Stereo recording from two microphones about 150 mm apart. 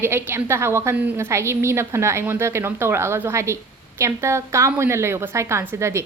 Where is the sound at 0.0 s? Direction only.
15° right (ahead or behind).